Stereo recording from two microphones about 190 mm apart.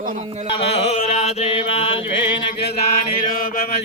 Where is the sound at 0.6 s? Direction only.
30° left (ahead or behind).